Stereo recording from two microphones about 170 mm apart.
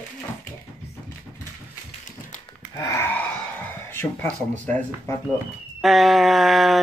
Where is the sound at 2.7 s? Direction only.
20° left (ahead or behind).